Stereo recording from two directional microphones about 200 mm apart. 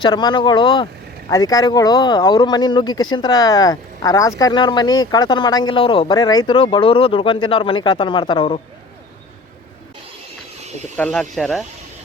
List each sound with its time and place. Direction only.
0.0 s speech: 20° left (ahead or behind)
10.9 s speech: 5° left (ahead or behind)